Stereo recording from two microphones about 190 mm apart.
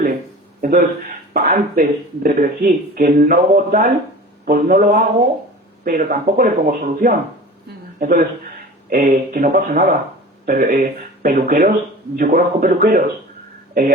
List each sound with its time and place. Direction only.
0.6 s speech: 50° right (ahead or behind)